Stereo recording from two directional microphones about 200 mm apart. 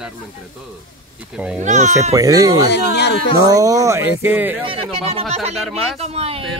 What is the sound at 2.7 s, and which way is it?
Speech, 55° left (ahead or behind).